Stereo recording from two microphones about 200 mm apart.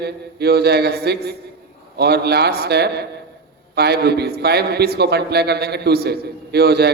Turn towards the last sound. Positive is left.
turn(degrees=-55)  # may be behind; listen again after turning